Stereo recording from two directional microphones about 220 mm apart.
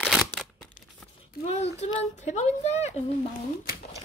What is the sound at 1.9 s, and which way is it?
A woman's voice, 30° left (ahead or behind).